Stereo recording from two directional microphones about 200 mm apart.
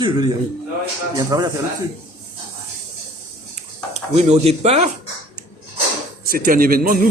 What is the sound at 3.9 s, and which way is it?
Speech, 35° right (ahead or behind).